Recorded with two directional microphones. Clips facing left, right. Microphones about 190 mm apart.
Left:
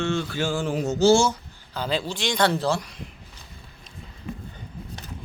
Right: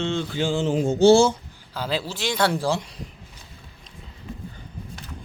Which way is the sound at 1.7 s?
5° right (ahead or behind).